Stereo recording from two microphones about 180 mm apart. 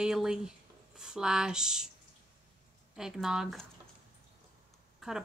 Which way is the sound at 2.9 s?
5° right (ahead or behind).